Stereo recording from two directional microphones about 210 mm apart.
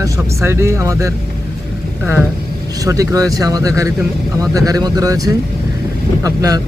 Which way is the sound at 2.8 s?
15° right (ahead or behind).